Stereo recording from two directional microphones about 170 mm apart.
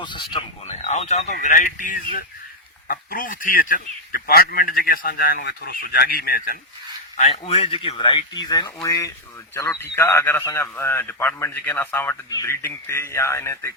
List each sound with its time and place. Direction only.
0.0 s speech: 25° left (ahead or behind)
0.7 s speech: 40° left (ahead or behind); by 6.6 s 60° left (ahead or behind)
7.2 s a man's voice: 35° left (ahead or behind); by 13.7 s 15° left (ahead or behind)